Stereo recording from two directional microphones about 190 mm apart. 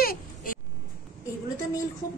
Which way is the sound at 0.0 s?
50° left (ahead or behind).